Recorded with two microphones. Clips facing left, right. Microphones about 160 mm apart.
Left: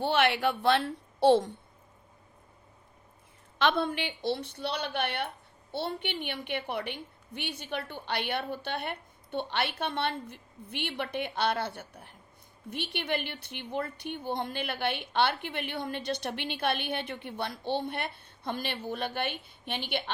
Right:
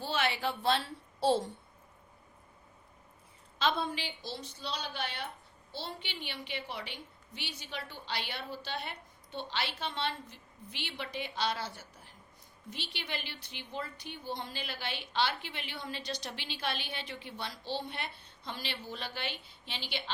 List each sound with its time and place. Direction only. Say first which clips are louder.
0.0 s a woman's voice: left 7 dB; 60° left (ahead or behind)
3.6 s a woman's voice: left 5 dB; 60° left (ahead or behind)